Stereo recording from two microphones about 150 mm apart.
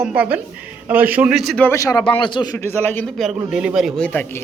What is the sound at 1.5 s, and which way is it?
A man's voice, 15° left (ahead or behind).